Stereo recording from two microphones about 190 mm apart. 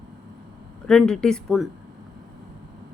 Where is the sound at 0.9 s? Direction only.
Centre (ahead or behind).